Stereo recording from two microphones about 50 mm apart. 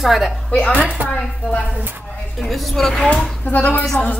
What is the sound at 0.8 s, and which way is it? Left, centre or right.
Speech, right.